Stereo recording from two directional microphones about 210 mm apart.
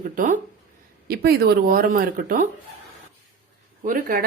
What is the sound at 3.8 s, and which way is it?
Speech, 45° right (ahead or behind).